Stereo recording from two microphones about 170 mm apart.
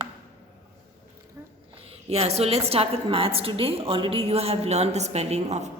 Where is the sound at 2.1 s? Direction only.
40° right (ahead or behind).